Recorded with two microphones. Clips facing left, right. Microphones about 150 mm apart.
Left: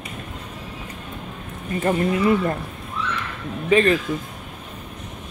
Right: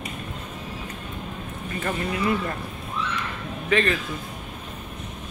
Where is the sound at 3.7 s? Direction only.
25° left (ahead or behind).